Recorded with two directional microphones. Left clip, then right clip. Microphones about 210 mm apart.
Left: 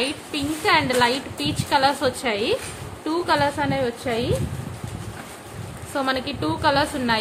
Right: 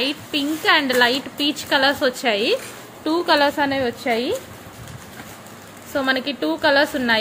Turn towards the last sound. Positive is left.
turn(degrees=-15)  # may be behind; listen again after turning